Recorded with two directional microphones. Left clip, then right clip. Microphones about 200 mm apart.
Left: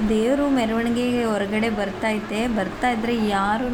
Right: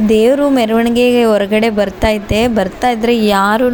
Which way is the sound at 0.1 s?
40° right (ahead or behind).